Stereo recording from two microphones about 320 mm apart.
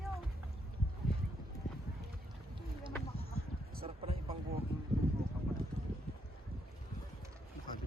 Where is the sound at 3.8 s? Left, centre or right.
Centre.